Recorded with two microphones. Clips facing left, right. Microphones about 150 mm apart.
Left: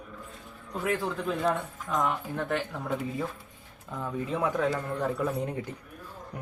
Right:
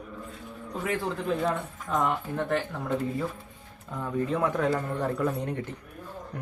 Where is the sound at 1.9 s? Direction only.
Centre (ahead or behind).